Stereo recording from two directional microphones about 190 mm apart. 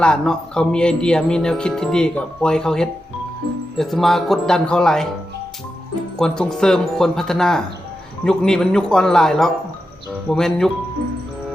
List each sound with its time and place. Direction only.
0.0 s music: 5° left (ahead or behind)
6.1 s music: 5° left (ahead or behind)